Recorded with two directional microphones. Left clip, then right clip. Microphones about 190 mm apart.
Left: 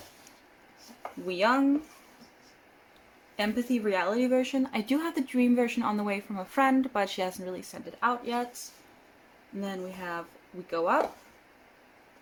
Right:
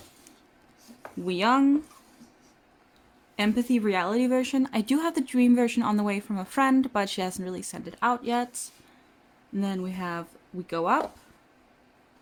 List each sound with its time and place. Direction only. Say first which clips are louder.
1.2 s speech: right 2 dB; 50° right (ahead or behind)
3.3 s speech: right 3 dB; 55° right (ahead or behind)
9.6 s speech: right 4 dB; 55° right (ahead or behind)